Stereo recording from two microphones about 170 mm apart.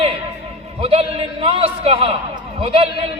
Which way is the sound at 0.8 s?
35° right (ahead or behind).